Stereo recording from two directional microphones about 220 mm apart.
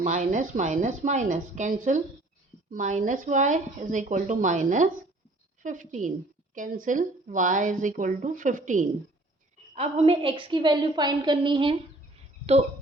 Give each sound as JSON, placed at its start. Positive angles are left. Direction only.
{"t": 0.0, "sound": "a woman's voice", "side_deg": -35}